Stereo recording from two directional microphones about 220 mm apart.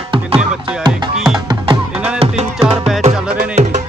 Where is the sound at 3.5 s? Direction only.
35° right (ahead or behind).